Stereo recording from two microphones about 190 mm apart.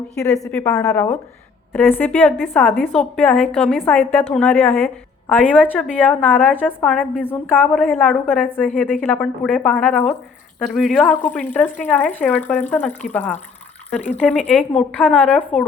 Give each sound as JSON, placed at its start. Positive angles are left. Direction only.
{"t": 0.2, "sound": "a woman's voice", "side_deg": 5}
{"t": 7.7, "sound": "a woman's voice", "side_deg": 0}